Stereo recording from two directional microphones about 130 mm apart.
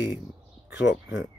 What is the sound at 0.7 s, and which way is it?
Speech, 25° right (ahead or behind).